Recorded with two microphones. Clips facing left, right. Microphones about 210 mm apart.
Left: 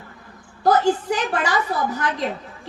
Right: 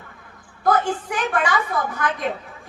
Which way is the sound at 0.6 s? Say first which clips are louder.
Left 3 dB; 35° left (ahead or behind).